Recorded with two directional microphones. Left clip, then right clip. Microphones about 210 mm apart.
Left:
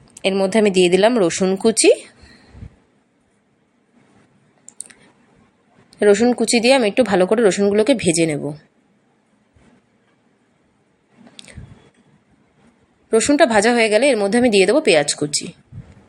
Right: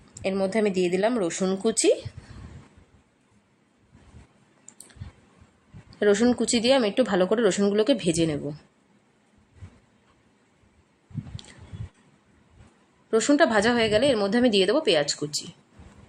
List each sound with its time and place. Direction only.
0.2 s a woman's voice: 15° left (ahead or behind)
6.0 s a woman's voice: 10° left (ahead or behind)
13.1 s a woman's voice: 10° left (ahead or behind)